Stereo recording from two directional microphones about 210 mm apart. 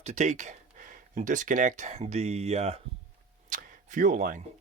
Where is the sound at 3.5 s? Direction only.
35° right (ahead or behind).